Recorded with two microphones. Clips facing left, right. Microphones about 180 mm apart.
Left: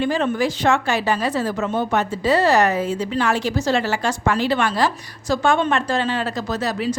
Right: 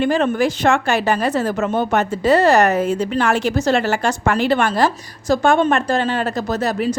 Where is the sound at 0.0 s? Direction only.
55° right (ahead or behind).